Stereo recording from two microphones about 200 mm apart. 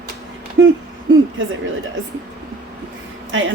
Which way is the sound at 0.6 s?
55° right (ahead or behind).